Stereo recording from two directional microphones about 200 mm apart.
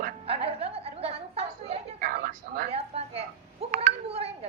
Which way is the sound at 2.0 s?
45° right (ahead or behind).